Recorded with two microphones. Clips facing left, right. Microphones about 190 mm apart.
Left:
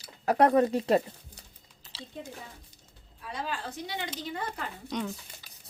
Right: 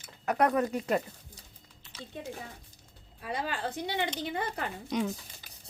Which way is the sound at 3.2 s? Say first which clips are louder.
Right 2 dB; 65° right (ahead or behind).